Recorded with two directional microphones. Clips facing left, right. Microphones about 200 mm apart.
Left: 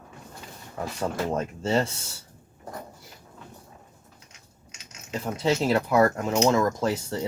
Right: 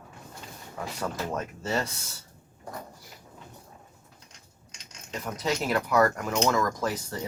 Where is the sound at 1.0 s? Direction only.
25° left (ahead or behind).